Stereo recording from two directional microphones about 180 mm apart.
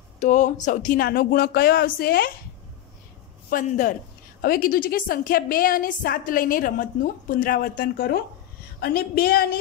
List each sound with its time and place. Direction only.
0.2 s speech: 45° left (ahead or behind)
3.4 s a man's voice: 45° left (ahead or behind)